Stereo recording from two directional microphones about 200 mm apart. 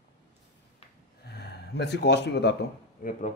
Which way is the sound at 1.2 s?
55° left (ahead or behind).